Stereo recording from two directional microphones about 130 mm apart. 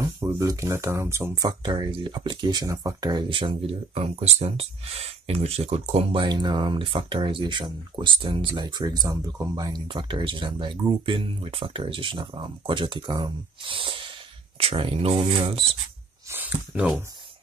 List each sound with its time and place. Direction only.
0.0 s speech: 25° right (ahead or behind)
1.4 s speech: 35° right (ahead or behind); by 6.2 s 55° right (ahead or behind)
6.2 s speech: 35° right (ahead or behind)
9.8 s speech: 40° right (ahead or behind)
16.3 s a sound: 15° right (ahead or behind)